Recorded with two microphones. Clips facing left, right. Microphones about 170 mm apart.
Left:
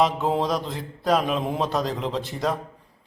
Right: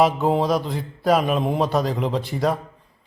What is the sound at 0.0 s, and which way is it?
A man's voice, 5° right (ahead or behind).